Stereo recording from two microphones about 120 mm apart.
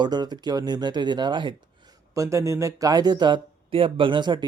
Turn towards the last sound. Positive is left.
turn(degrees=-40)  # may be behind; listen again after turning